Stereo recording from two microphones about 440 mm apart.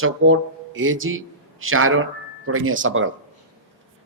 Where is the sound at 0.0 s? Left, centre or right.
Right.